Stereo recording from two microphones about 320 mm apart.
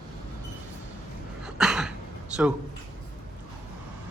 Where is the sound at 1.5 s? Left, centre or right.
Centre.